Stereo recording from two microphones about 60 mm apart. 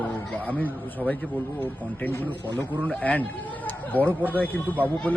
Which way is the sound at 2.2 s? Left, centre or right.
Left.